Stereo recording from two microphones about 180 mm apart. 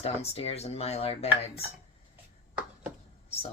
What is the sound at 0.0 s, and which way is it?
Speech, 35° left (ahead or behind).